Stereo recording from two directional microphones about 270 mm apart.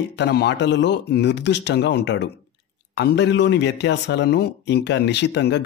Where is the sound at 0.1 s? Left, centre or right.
Left.